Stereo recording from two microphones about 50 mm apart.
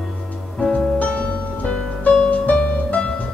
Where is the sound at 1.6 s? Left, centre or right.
Left.